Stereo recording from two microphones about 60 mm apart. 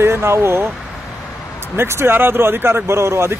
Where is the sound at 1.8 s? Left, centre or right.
Right.